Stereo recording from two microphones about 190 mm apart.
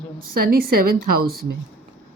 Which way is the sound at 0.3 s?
50° right (ahead or behind).